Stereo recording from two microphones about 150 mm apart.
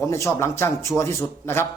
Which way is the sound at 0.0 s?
20° left (ahead or behind).